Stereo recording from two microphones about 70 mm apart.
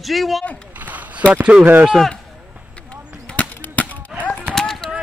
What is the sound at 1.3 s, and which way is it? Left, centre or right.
Speech, right.